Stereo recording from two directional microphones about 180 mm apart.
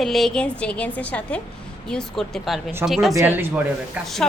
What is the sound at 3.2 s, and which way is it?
Speech, 10° right (ahead or behind).